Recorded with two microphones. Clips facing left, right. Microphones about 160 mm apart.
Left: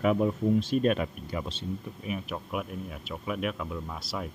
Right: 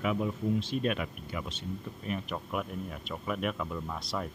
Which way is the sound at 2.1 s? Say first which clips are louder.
Left 1 dB; 5° left (ahead or behind).